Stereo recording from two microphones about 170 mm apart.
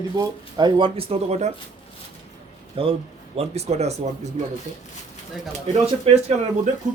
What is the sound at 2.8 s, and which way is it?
Speech, 35° right (ahead or behind).